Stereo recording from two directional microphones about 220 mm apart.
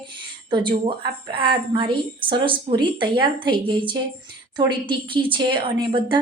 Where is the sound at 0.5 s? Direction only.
20° right (ahead or behind).